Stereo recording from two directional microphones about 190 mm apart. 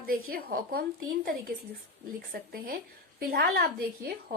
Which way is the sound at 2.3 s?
50° right (ahead or behind).